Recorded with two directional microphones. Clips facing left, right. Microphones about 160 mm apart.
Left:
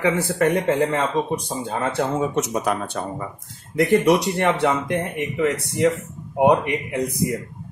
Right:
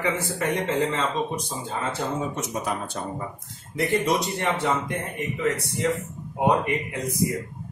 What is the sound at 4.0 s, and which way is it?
Speech, 70° left (ahead or behind).